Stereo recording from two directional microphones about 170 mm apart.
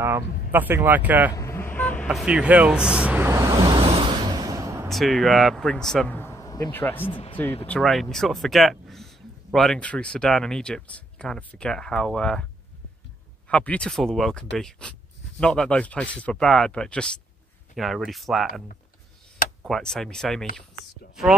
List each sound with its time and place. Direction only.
0.5 s speech: 10° right (ahead or behind)
1.3 s vehicle: 15° left (ahead or behind)
2.0 s vehicle: 5° right (ahead or behind)
4.8 s speech: centre (ahead or behind)
7.1 s speech: 30° left (ahead or behind)
7.6 s speech: 5° left (ahead or behind)
13.5 s speech: 5° left (ahead or behind)
19.7 s speech: 5° left (ahead or behind)